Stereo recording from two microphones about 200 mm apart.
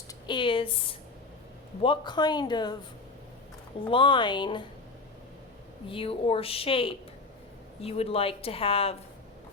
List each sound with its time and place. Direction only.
0.3 s speech: 25° left (ahead or behind)
3.8 s speech: 25° left (ahead or behind)
5.9 s speech: 25° left (ahead or behind)